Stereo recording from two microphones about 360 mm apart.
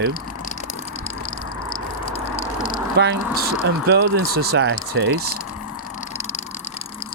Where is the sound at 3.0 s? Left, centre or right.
Right.